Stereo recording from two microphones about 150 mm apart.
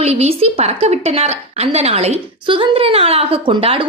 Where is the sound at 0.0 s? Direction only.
45° right (ahead or behind).